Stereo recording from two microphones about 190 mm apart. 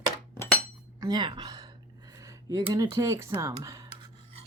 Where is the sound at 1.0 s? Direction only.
20° right (ahead or behind).